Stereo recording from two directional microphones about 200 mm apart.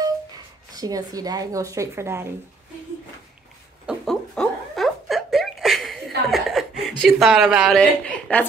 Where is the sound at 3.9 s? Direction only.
Centre (ahead or behind).